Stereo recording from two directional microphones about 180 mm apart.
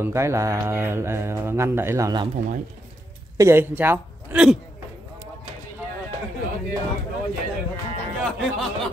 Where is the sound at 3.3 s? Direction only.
15° right (ahead or behind).